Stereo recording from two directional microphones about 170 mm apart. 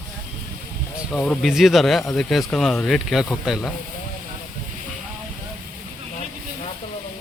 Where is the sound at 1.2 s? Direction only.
5° left (ahead or behind).